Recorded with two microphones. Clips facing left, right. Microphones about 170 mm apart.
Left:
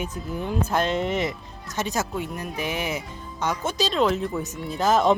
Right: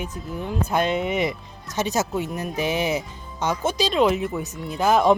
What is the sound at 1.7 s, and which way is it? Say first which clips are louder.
Speech: right 3 dB; 20° right (ahead or behind).